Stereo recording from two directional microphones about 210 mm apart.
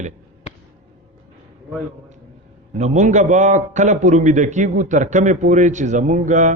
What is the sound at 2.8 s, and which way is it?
A man's voice, 35° right (ahead or behind).